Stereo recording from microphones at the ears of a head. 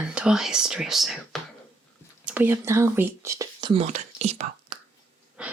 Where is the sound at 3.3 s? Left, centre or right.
Right.